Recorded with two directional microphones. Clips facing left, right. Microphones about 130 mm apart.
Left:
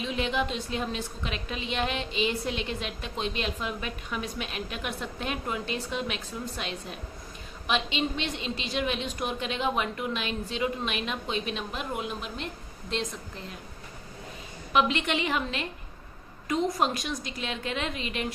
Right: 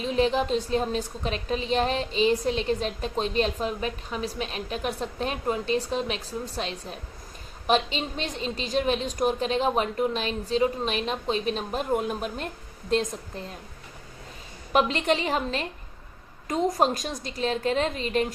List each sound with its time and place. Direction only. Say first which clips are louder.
0.0 s a woman's voice: right 5 dB; 35° right (ahead or behind)
14.7 s a woman's voice: right 3 dB; 40° right (ahead or behind)